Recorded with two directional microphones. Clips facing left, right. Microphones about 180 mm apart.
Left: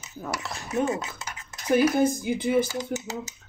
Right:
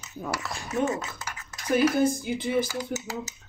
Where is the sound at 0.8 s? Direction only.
25° left (ahead or behind).